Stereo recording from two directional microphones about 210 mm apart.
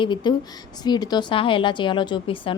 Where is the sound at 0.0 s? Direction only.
20° left (ahead or behind).